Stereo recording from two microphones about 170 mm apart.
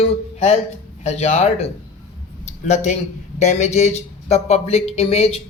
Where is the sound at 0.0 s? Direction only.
35° left (ahead or behind).